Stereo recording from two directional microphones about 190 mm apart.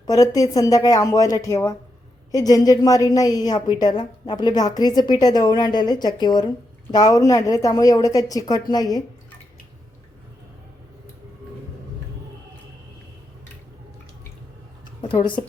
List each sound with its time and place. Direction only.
0.0 s a woman's voice: 20° left (ahead or behind)
15.0 s speech: 30° left (ahead or behind)